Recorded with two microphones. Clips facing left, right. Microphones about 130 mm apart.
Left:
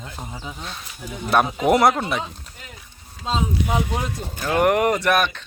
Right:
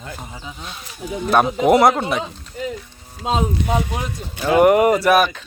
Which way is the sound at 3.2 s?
60° right (ahead or behind).